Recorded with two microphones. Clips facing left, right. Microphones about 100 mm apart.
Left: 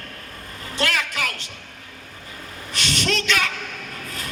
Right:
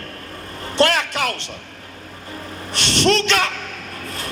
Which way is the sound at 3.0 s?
35° right (ahead or behind).